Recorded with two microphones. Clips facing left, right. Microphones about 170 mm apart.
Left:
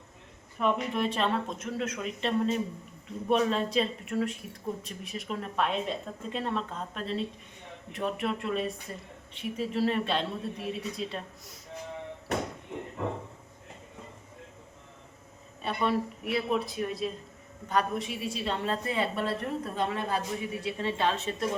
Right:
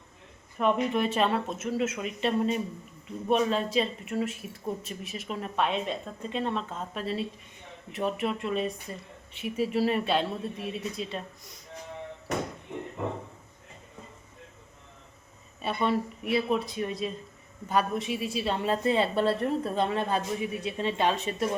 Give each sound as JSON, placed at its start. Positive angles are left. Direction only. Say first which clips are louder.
{"t": 0.6, "sound": "a woman's voice", "louder": "right 3 dB", "side_deg": 0}
{"t": 15.6, "sound": "a woman's voice", "louder": "right 1 dB", "side_deg": 0}
{"t": 18.9, "sound": "a woman's voice", "louder": "right 8 dB", "side_deg": -30}